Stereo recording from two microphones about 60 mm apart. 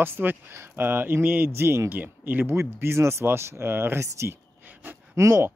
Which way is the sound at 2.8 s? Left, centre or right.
Right.